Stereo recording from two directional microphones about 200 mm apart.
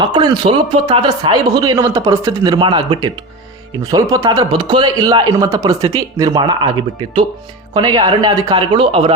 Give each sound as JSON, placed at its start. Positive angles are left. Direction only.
{"t": 0.0, "sound": "speech", "side_deg": -20}
{"t": 7.7, "sound": "speech", "side_deg": -20}